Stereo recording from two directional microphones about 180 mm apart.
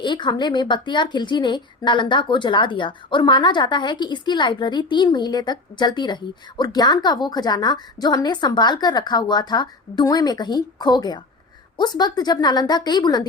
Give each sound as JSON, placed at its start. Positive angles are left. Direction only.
{"t": 0.0, "sound": "a woman's voice", "side_deg": 25}